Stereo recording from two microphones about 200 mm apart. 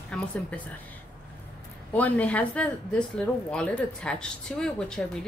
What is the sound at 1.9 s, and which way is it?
A woman's voice, 5° left (ahead or behind).